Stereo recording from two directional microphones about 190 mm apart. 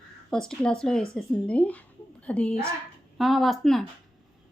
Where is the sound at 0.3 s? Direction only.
5° left (ahead or behind).